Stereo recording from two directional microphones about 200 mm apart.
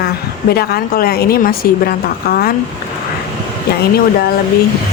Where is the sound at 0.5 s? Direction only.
50° left (ahead or behind).